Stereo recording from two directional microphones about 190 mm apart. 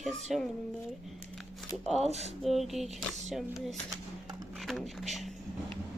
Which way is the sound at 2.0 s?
35° right (ahead or behind).